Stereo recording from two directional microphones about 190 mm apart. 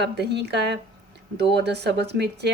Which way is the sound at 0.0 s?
60° right (ahead or behind).